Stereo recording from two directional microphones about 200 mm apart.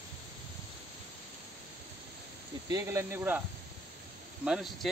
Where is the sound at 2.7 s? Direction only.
15° right (ahead or behind).